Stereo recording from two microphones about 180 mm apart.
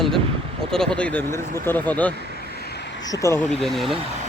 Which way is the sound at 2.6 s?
65° left (ahead or behind).